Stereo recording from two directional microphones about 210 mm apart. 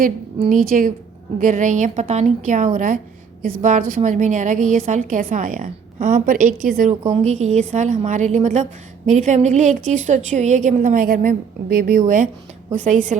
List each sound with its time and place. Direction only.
0.0 s a woman's voice: 40° right (ahead or behind)